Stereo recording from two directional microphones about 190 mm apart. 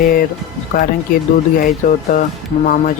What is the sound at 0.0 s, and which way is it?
Speech, 45° left (ahead or behind).